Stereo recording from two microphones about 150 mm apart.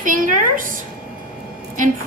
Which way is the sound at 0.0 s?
60° right (ahead or behind).